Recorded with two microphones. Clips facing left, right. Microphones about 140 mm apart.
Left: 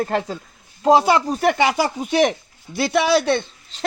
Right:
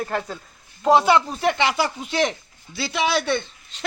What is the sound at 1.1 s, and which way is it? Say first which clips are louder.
Speech: left 2 dB; 40° left (ahead or behind).